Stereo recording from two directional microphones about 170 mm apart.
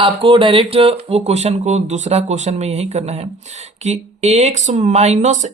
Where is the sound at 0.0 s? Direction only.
30° right (ahead or behind).